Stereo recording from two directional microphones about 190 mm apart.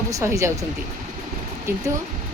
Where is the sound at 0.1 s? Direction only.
15° right (ahead or behind).